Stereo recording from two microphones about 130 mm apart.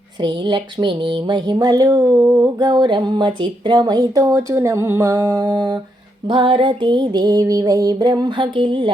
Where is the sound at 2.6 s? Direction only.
35° right (ahead or behind).